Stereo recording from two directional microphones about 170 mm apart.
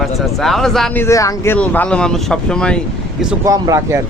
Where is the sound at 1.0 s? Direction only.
20° left (ahead or behind); by 3.3 s centre (ahead or behind).